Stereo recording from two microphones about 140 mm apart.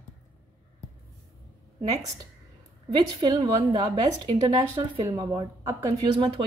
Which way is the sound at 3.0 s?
35° right (ahead or behind).